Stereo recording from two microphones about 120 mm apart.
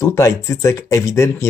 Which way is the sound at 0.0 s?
25° left (ahead or behind).